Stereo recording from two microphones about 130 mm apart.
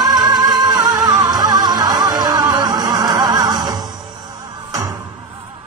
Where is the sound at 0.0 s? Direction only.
30° right (ahead or behind).